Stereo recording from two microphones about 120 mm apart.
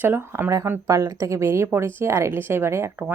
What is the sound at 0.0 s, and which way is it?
Speech, 20° right (ahead or behind).